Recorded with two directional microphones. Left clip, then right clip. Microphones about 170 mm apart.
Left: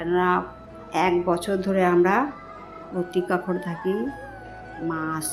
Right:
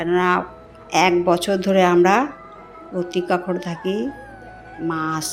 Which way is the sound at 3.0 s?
Centre (ahead or behind).